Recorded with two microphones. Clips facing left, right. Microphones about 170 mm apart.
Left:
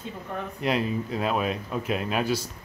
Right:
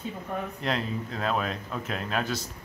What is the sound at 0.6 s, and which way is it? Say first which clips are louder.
Speech: left 7 dB; 10° left (ahead or behind).